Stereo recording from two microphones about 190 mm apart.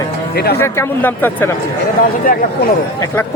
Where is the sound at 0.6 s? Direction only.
10° left (ahead or behind).